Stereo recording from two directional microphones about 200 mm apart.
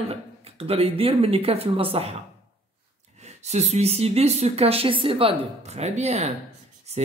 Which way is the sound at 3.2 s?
35° right (ahead or behind).